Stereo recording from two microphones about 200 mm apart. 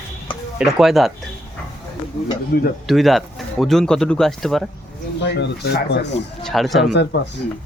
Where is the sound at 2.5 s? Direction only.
50° left (ahead or behind).